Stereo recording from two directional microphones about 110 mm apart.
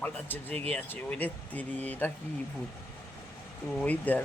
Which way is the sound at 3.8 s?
15° left (ahead or behind).